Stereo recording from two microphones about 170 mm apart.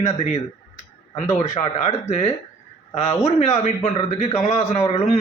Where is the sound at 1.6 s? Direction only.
40° left (ahead or behind).